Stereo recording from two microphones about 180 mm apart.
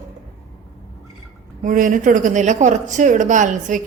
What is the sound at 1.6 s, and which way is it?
A woman's voice, 45° right (ahead or behind).